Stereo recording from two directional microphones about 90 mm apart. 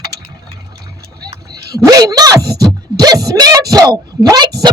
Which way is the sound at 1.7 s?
45° right (ahead or behind).